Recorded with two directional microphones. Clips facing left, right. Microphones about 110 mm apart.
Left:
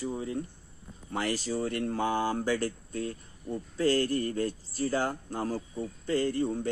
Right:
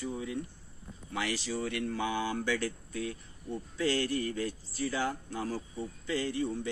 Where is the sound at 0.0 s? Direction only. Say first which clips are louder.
Left 3 dB; 35° left (ahead or behind).